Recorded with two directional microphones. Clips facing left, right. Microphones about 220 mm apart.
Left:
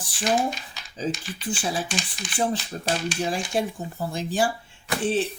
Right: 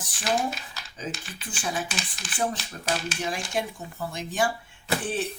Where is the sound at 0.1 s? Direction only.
Centre (ahead or behind).